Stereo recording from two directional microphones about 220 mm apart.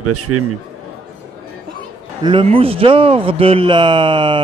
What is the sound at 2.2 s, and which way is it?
Speech, 25° right (ahead or behind).